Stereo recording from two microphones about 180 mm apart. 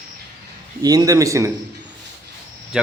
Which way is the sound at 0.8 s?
20° right (ahead or behind).